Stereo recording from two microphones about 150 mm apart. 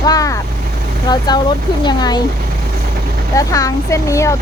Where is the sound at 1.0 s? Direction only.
25° left (ahead or behind).